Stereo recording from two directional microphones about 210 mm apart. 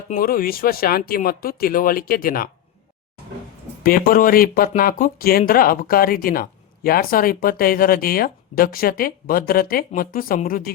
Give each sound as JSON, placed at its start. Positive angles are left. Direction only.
{"t": 0.1, "sound": "speech", "side_deg": 45}
{"t": 3.8, "sound": "speech", "side_deg": 45}